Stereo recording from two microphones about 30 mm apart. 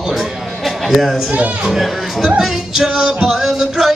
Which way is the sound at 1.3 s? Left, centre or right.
Right.